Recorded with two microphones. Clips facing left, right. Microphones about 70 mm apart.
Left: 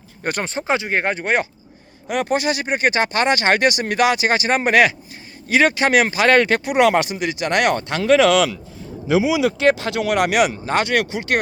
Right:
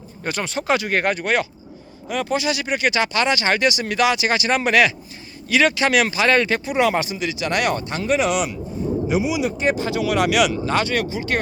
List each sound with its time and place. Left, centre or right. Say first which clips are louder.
0.2 s speech: left 2 dB; left
0.4 s speech: right 3 dB; left
2.0 s speech: left 2 dB; left
10.8 s speech: left 3 dB; left